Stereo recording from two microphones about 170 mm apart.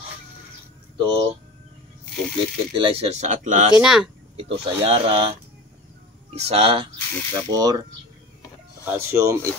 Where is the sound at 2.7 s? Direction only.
30° right (ahead or behind); by 3.7 s 50° right (ahead or behind).